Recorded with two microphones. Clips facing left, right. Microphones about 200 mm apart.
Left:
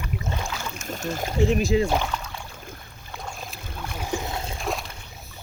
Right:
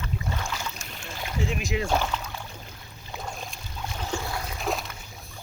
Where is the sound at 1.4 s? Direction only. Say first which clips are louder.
Left 8 dB; 40° left (ahead or behind).